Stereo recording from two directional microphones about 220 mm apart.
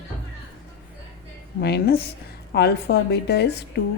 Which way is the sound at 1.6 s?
45° left (ahead or behind).